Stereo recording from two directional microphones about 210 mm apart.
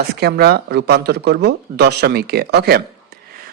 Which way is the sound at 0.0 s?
50° right (ahead or behind).